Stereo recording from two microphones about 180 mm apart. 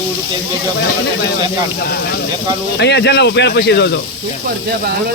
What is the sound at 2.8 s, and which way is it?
Speech, 70° left (ahead or behind).